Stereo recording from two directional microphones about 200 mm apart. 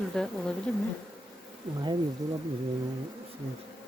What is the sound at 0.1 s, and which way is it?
Speech, 5° left (ahead or behind).